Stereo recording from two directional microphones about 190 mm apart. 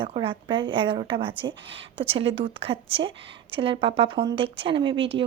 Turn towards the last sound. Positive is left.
turn(degrees=-25)  # may be behind; listen again after turning